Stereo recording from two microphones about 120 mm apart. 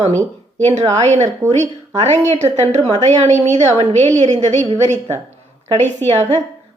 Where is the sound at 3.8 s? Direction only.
55° right (ahead or behind).